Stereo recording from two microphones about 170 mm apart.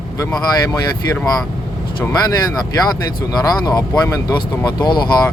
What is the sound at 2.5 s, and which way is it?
Speech, 20° left (ahead or behind).